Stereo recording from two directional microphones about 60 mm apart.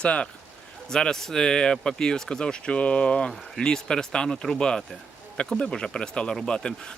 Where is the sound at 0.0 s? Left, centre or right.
Centre.